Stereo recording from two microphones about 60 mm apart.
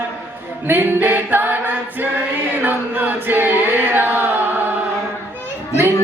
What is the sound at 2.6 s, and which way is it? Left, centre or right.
Choir, right.